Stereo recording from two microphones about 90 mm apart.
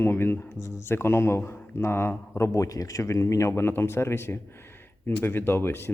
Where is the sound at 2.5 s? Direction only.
40° left (ahead or behind).